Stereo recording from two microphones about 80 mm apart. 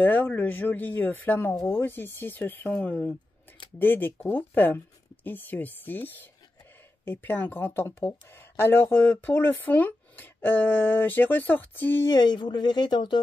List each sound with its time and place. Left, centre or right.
0.0 s speech: left
12.1 s speech: left